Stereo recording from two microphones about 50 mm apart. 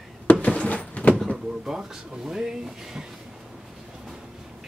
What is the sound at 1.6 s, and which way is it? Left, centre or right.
Speech, centre.